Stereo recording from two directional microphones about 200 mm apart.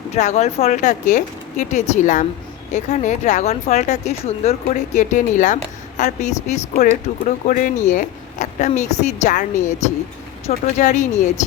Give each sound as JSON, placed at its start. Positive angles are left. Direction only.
{"t": 0.1, "sound": "speech", "side_deg": 35}